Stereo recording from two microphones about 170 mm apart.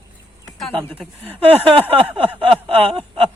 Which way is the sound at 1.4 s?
35° right (ahead or behind).